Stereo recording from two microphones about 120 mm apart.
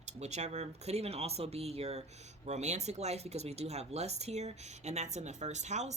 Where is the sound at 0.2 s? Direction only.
70° right (ahead or behind).